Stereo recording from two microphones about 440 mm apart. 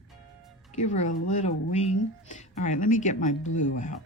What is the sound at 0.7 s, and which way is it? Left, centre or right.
Speech, centre.